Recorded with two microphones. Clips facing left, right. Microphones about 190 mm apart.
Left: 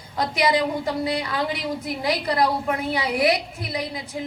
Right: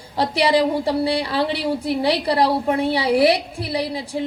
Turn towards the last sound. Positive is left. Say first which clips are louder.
# right 5 dB
turn(degrees=-30)  # may be behind; listen again after turning